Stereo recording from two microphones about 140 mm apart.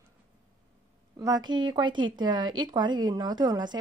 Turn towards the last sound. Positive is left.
turn(degrees=-30)  # may be behind; listen again after turning